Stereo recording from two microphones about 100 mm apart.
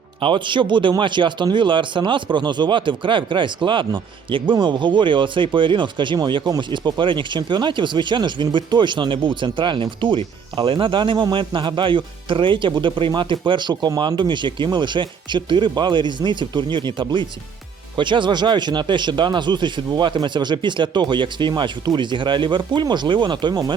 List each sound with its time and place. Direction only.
0.2 s speech: 55° right (ahead or behind)